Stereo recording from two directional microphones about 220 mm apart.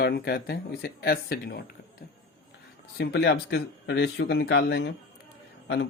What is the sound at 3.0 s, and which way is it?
Speech, 50° left (ahead or behind).